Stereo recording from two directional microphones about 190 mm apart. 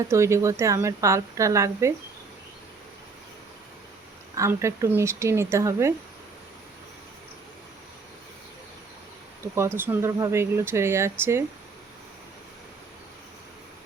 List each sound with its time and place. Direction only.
0.1 s speech: 15° right (ahead or behind)
4.4 s speech: 15° right (ahead or behind)
9.6 s speech: 10° right (ahead or behind)